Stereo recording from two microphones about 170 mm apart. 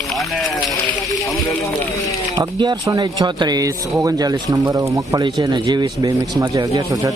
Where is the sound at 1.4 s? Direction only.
20° left (ahead or behind).